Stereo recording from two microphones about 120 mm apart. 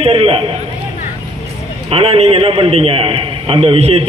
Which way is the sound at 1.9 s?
55° right (ahead or behind).